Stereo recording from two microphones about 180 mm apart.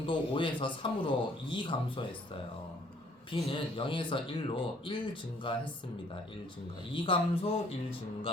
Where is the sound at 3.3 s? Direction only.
30° left (ahead or behind).